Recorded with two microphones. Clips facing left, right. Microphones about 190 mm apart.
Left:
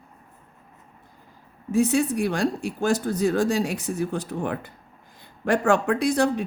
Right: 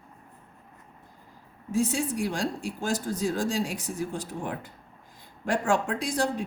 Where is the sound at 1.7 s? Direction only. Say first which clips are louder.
Left 6 dB; 65° left (ahead or behind).